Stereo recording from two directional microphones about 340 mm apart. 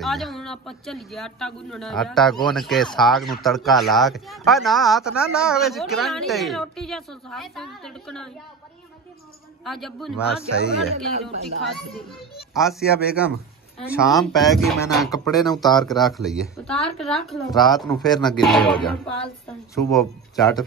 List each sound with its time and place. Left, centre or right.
0.0 s speech: centre
9.7 s speech: centre
10.5 s speech: left
11.1 s speech: centre
11.7 s speech: centre
15.3 s speech: centre
15.8 s speech: centre